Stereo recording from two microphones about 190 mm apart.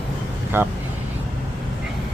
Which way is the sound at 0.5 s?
10° right (ahead or behind).